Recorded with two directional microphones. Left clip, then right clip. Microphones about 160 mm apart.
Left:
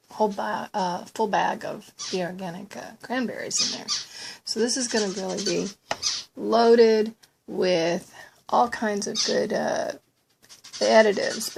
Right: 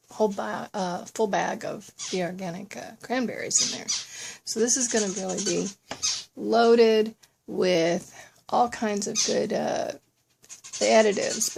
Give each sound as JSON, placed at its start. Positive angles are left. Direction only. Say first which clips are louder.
{"t": 0.2, "sound": "speech", "louder": "left 1 dB", "side_deg": -20}
{"t": 7.5, "sound": "speech", "louder": "even", "side_deg": -25}